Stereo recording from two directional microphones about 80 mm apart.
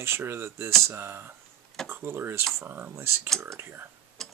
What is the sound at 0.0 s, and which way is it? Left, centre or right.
Speech, right.